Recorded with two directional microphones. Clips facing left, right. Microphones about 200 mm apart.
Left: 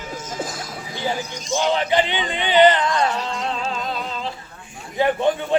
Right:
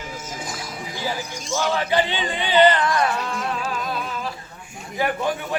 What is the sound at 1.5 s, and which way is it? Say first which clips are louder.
A man's voice: left 2 dB; 20° left (ahead or behind).